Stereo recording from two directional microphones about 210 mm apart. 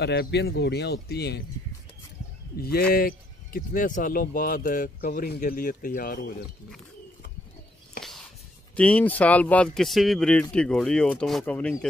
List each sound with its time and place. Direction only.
0.0 s speech: 50° left (ahead or behind)
2.5 s speech: 45° left (ahead or behind)
8.7 s speech: 5° left (ahead or behind)